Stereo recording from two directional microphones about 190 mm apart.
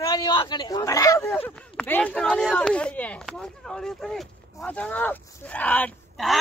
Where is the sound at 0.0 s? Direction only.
20° left (ahead or behind).